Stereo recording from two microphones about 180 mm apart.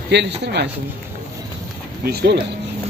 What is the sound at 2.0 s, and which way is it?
Speech, 65° right (ahead or behind).